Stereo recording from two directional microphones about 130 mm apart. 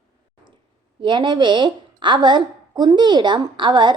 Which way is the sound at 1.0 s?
35° right (ahead or behind).